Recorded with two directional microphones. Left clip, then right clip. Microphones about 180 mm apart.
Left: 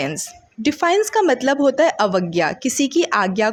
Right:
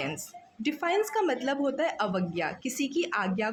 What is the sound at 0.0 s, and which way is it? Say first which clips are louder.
Speech: left 10 dB; 40° left (ahead or behind).